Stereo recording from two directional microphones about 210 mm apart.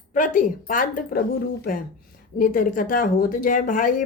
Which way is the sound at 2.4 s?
40° left (ahead or behind).